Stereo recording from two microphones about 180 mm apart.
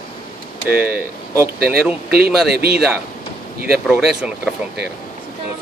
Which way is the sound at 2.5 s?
60° right (ahead or behind).